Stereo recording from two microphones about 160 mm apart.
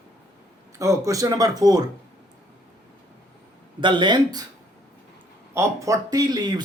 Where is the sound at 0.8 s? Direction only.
20° right (ahead or behind).